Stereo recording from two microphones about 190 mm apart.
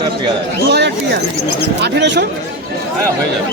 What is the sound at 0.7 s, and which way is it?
A man's voice, 60° right (ahead or behind).